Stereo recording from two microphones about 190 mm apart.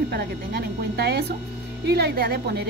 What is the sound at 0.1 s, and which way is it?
A woman's voice, 60° right (ahead or behind).